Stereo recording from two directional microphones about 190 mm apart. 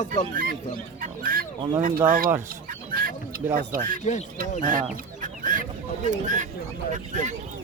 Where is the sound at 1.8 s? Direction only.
45° right (ahead or behind).